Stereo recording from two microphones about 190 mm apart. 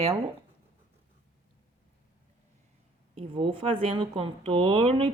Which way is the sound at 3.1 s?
25° right (ahead or behind).